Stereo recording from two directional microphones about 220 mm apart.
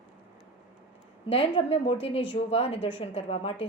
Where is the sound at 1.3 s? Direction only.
25° left (ahead or behind).